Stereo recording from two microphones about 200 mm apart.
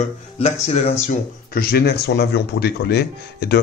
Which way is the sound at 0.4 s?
30° left (ahead or behind).